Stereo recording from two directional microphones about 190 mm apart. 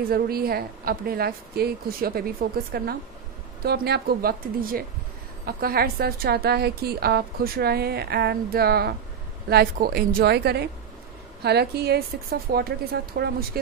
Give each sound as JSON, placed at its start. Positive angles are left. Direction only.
{"t": 0.1, "sound": "a woman's voice", "side_deg": -55}